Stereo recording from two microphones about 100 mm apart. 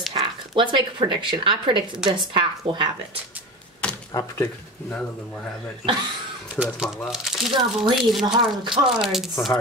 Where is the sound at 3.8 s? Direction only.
10° left (ahead or behind).